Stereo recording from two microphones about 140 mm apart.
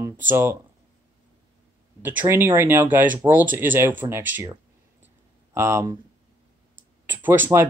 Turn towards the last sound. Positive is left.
turn(degrees=-15)  # may be behind; listen again after turning